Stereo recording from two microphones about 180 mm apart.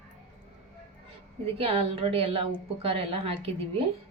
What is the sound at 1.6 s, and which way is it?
A woman's voice, 30° right (ahead or behind).